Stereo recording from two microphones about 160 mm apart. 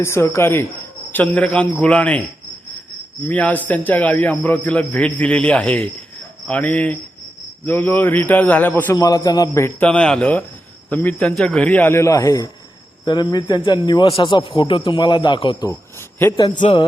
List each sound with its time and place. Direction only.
0.0 s a man's voice: 15° left (ahead or behind)
3.2 s a man's voice: 10° left (ahead or behind); by 15.7 s 30° left (ahead or behind)
16.0 s a sound: 15° left (ahead or behind)